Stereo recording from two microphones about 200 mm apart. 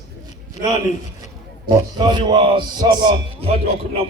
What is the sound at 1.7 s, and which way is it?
Speech, 20° right (ahead or behind).